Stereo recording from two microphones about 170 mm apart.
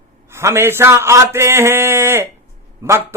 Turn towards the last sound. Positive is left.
turn(degrees=-15)  # may be behind; listen again after turning